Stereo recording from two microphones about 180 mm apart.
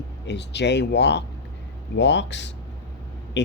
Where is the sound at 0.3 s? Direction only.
70° left (ahead or behind).